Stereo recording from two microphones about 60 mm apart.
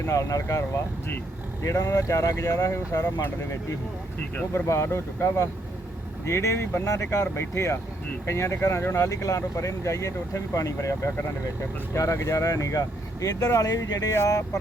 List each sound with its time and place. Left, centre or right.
0.1 s speech: left
1.6 s speech: left
3.2 s speech: left
4.5 s speech: left
9.0 s speech: left
13.2 s speech: left
14.3 s speech: left